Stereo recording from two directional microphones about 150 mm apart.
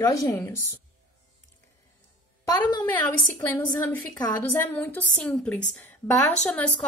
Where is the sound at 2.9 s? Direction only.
10° left (ahead or behind).